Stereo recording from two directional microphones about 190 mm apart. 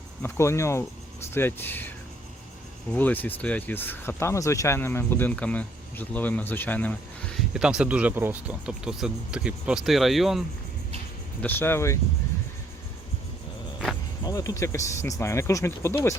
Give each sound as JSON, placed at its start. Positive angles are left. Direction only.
{"t": 0.2, "sound": "speech", "side_deg": 15}
{"t": 2.9, "sound": "speech", "side_deg": 10}
{"t": 7.5, "sound": "speech", "side_deg": -5}
{"t": 11.4, "sound": "speech", "side_deg": 10}
{"t": 14.3, "sound": "speech", "side_deg": 15}